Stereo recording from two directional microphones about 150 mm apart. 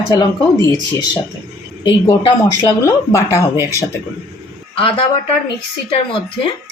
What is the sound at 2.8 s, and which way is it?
Speech, 20° left (ahead or behind).